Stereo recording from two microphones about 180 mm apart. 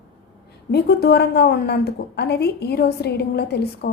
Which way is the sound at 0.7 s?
65° left (ahead or behind).